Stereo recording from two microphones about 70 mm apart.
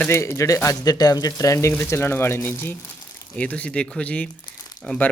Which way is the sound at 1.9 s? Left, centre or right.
Left.